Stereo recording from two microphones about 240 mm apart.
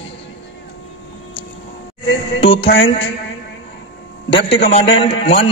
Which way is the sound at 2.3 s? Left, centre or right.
Left.